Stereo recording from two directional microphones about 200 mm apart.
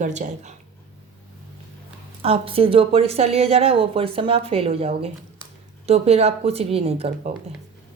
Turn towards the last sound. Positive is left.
turn(degrees=-30)  # may be behind; listen again after turning